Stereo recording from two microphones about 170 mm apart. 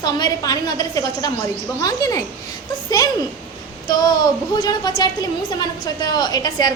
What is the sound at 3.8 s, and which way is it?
A woman's voice, 25° left (ahead or behind).